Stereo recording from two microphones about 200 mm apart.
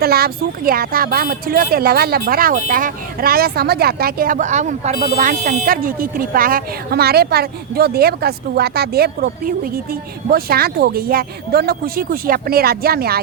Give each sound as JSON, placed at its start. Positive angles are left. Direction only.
{"t": 0.0, "sound": "speech", "side_deg": -50}